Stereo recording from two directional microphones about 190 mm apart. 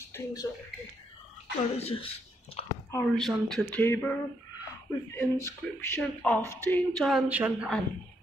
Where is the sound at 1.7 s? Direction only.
30° left (ahead or behind).